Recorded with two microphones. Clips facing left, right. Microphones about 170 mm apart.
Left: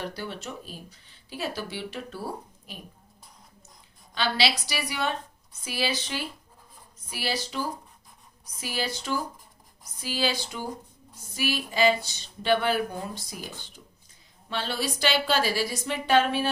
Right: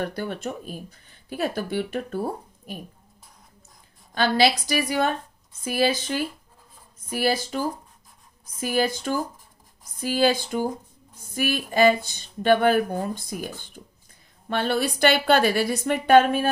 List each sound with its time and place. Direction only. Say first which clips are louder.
0.0 s speech: right 6 dB; 50° right (ahead or behind)
4.1 s a woman's voice: right 6 dB; 50° right (ahead or behind)